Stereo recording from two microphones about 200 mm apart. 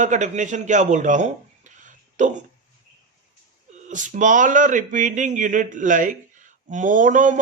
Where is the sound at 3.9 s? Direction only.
40° right (ahead or behind).